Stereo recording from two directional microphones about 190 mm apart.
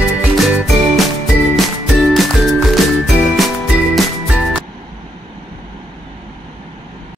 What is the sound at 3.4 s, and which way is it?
Music, centre (ahead or behind).